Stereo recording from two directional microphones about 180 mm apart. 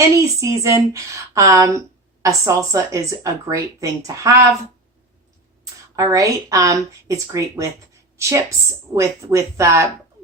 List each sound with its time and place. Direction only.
0.3 s speech: 15° right (ahead or behind)
6.0 s speech: 20° right (ahead or behind)